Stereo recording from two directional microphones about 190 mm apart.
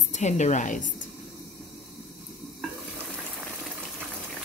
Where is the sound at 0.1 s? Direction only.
40° left (ahead or behind).